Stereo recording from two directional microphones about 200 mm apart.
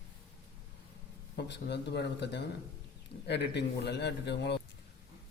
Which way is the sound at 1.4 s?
60° left (ahead or behind).